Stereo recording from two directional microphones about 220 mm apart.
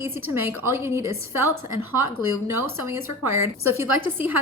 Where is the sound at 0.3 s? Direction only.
10° right (ahead or behind).